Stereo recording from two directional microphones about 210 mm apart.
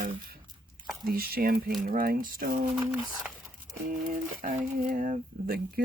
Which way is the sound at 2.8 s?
5° right (ahead or behind).